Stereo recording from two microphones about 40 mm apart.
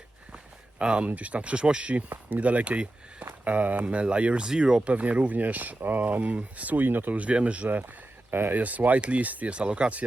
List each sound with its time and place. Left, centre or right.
0.8 s speech: right
3.4 s speech: right
4.9 s speech: right
7.2 s speech: right
8.3 s speech: right